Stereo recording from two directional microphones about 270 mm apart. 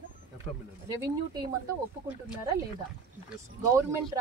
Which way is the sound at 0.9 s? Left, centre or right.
Centre.